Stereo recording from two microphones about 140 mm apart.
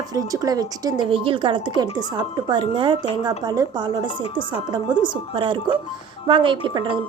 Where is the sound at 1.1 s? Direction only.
40° right (ahead or behind).